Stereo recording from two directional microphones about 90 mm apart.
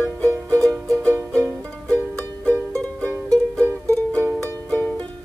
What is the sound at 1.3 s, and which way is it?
Music, 15° left (ahead or behind).